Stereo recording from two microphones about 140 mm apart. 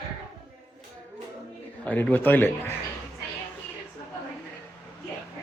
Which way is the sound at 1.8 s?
10° left (ahead or behind).